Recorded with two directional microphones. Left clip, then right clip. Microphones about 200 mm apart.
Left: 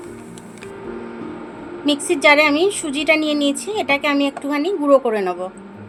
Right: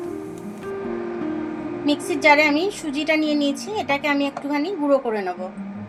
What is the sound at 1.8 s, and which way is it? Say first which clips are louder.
A woman's voice: left 3 dB; 35° left (ahead or behind).